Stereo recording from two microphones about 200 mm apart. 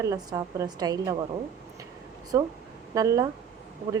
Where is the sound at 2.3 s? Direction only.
15° right (ahead or behind).